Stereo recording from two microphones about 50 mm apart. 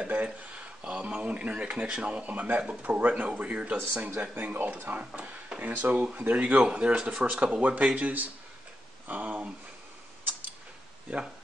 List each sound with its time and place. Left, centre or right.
0.0 s speech: right
5.1 s speech: right
5.8 s speech: right
6.6 s speech: right